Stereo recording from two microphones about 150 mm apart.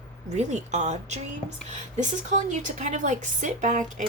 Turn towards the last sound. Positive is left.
turn(degrees=-55)  # may be behind; listen again after turning